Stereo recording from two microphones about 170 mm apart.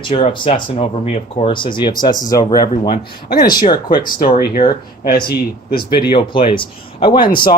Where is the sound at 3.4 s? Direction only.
25° left (ahead or behind).